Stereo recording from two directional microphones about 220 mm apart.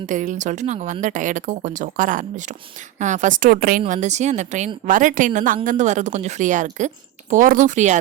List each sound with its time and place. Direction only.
0.0 s a woman's voice: 35° right (ahead or behind)